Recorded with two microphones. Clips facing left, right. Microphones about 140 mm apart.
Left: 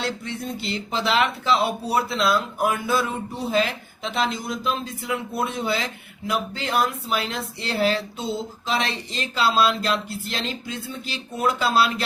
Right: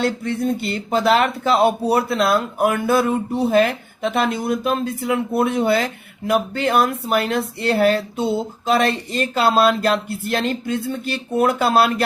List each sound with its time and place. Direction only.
0.0 s speech: 55° right (ahead or behind)